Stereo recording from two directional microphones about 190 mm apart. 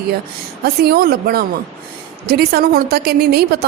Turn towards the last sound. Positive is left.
turn(degrees=-55)  # may be behind; listen again after turning